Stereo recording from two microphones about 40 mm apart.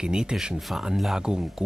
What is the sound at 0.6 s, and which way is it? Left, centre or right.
Speech, centre.